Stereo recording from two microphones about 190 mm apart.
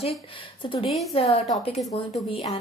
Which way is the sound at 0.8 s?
Centre (ahead or behind).